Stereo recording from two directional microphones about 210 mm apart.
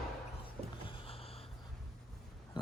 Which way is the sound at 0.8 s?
25° left (ahead or behind).